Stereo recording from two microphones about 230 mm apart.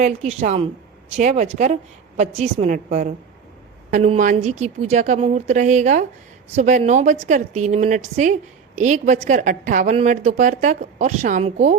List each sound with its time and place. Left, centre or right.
0.0 s a woman's voice: right